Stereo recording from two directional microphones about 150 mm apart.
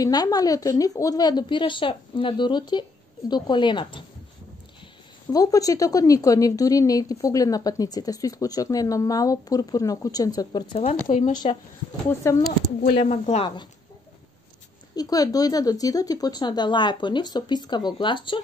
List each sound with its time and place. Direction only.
0.0 s a woman's voice: 25° left (ahead or behind)
5.3 s a woman's voice: 25° left (ahead or behind)
11.1 s speech: 50° left (ahead or behind)
12.1 s speech: 15° left (ahead or behind)
12.9 s speech: 50° left (ahead or behind)
15.0 s a woman's voice: 25° left (ahead or behind)